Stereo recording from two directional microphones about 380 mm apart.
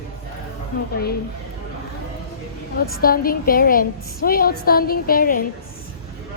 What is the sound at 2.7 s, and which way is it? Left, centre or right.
A woman's voice, left.